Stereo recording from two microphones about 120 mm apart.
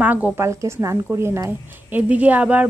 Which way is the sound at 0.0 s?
15° right (ahead or behind).